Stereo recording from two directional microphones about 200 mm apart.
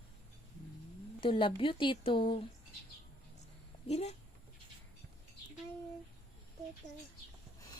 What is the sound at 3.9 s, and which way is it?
Speech, 30° left (ahead or behind).